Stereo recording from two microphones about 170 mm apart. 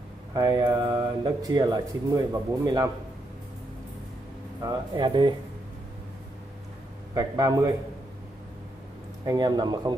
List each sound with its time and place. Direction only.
0.3 s speech: 25° right (ahead or behind)
4.6 s speech: 25° right (ahead or behind)
7.2 s speech: 20° right (ahead or behind)
9.2 s speech: 25° right (ahead or behind)